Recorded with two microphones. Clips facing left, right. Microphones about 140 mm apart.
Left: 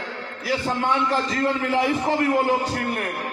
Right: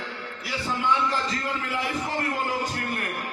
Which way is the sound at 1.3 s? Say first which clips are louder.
Left 7 dB; 90° left.